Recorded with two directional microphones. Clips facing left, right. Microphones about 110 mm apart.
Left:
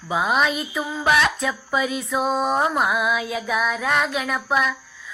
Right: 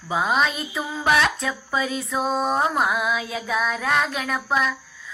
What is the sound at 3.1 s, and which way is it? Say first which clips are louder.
Child singing: left 2 dB; 35° right (ahead or behind).